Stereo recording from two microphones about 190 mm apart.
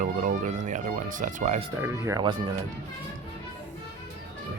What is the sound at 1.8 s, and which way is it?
Speech, 15° right (ahead or behind).